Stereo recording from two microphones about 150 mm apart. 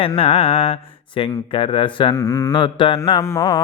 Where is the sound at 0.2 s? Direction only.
40° left (ahead or behind).